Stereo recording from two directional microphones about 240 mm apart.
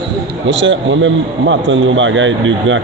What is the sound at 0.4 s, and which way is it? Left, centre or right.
Speech, right.